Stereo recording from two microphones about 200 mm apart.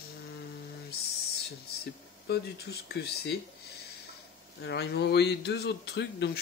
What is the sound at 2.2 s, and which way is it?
Speech, 55° left (ahead or behind).